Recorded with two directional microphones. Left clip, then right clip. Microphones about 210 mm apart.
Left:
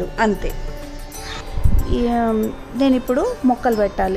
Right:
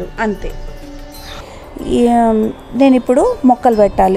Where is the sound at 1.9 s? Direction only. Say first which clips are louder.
Right 8 dB; 30° right (ahead or behind).